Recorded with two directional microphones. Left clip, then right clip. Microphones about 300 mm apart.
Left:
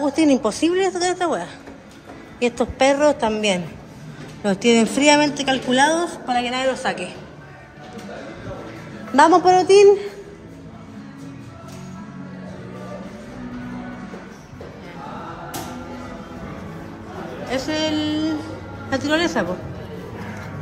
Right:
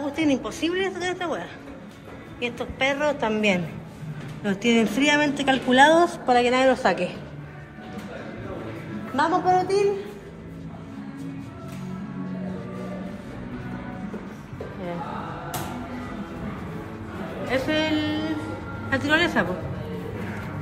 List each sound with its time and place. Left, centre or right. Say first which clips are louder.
0.0 s a woman's voice: left 7 dB; centre
9.1 s a woman's voice: left 8 dB; left
17.5 s speech: left 1 dB; centre